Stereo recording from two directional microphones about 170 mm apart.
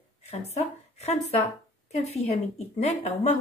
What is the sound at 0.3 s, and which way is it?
A woman's voice, 40° left (ahead or behind).